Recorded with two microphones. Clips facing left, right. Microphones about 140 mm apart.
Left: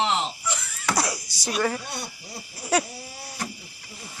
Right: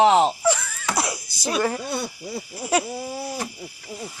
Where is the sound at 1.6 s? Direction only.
25° right (ahead or behind).